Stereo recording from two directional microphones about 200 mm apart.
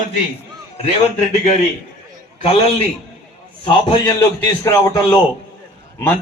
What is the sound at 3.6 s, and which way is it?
A man's voice, 25° left (ahead or behind).